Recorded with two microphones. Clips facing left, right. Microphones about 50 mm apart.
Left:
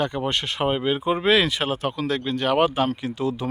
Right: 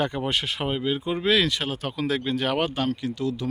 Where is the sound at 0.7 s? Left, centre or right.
Left.